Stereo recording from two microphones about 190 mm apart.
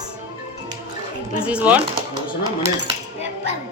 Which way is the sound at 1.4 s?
5° right (ahead or behind).